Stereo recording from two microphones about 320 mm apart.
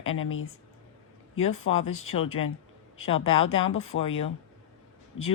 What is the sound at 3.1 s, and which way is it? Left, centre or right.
Speech, left.